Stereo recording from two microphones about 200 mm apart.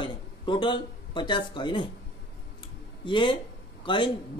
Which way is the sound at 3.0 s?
25° left (ahead or behind).